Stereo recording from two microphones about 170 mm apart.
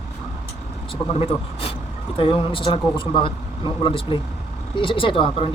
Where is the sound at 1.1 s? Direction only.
35° left (ahead or behind).